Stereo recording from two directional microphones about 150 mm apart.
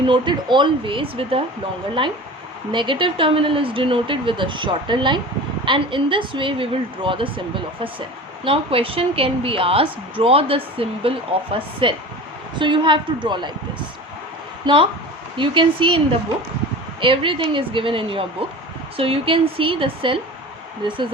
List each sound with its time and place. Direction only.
0.0 s a woman's voice: 30° right (ahead or behind)
8.4 s a woman's voice: 40° right (ahead or behind)
14.7 s a woman's voice: 30° right (ahead or behind)
17.0 s a woman's voice: 35° right (ahead or behind)